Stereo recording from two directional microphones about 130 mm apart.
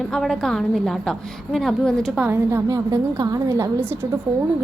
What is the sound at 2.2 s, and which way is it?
A woman's voice, 15° right (ahead or behind).